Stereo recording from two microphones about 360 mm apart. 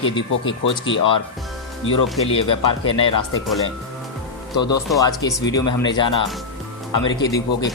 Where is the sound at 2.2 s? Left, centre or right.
Centre.